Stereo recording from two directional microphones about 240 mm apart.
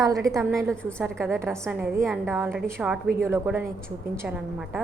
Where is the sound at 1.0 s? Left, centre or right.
Centre.